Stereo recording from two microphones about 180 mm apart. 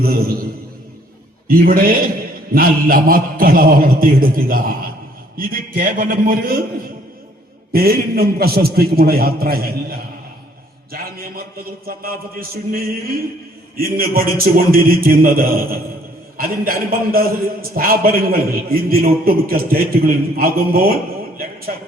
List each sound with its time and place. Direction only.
0.0 s a man's voice: 55° right (ahead or behind)
1.5 s a man's voice: 50° right (ahead or behind)
7.7 s a man's voice: 55° right (ahead or behind)